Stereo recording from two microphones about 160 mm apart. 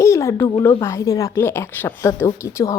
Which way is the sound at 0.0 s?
20° left (ahead or behind).